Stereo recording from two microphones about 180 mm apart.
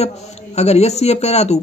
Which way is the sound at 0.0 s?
35° left (ahead or behind).